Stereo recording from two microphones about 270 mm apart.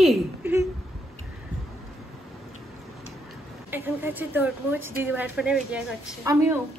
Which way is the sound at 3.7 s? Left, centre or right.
Centre.